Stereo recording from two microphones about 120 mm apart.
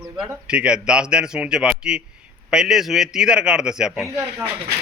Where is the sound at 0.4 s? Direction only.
10° right (ahead or behind).